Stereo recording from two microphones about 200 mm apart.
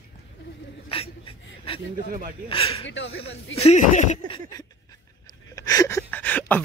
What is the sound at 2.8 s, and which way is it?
Speech, 65° left (ahead or behind).